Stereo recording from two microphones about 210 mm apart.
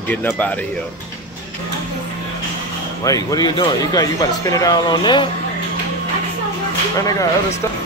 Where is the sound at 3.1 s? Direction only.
15° left (ahead or behind).